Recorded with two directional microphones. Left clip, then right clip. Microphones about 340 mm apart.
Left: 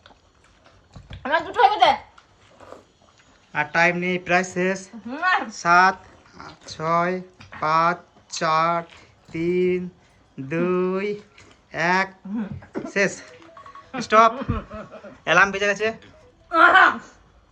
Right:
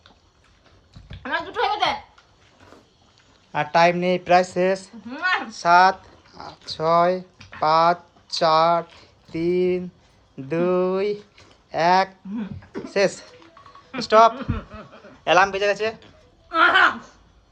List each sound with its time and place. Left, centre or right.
1.6 s a sound: left
3.5 s speech: centre
16.5 s speech: centre